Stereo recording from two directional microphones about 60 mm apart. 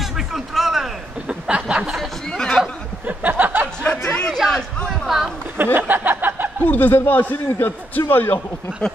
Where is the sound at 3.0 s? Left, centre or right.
Right.